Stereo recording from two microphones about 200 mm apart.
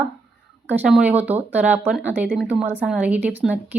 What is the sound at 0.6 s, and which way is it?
A woman's voice, 5° right (ahead or behind).